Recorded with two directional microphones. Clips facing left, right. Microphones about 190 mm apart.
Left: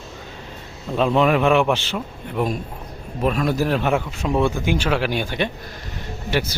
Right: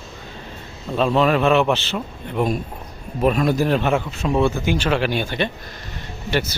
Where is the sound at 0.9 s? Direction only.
15° left (ahead or behind).